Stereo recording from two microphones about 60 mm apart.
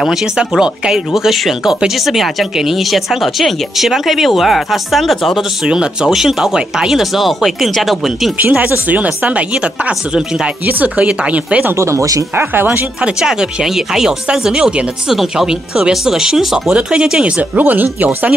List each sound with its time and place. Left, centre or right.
0.0 s speech: centre
5.7 s speech: centre
8.4 s speech: right
11.6 s speech: right
13.0 s speech: centre
17.6 s speech: right